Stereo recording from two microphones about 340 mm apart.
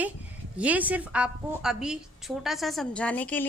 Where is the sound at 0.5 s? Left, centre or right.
Centre.